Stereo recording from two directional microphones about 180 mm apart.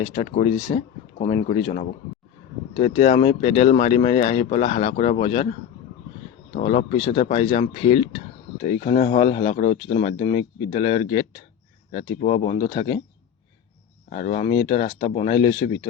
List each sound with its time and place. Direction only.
0.0 s speech: 30° left (ahead or behind)
6.6 s speech: 35° left (ahead or behind)
14.1 s speech: 35° left (ahead or behind)
14.8 s speech: 50° left (ahead or behind)
15.1 s speech: 30° left (ahead or behind)